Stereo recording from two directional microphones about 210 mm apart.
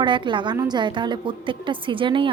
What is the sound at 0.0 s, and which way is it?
A woman's voice, 20° right (ahead or behind).